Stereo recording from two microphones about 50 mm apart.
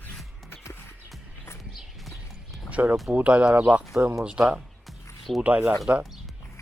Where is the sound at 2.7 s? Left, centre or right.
Right.